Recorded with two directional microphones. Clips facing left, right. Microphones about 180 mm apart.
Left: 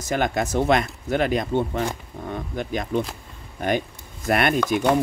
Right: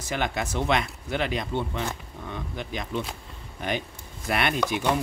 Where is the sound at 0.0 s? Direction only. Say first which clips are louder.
Left 5 dB; 45° left (ahead or behind).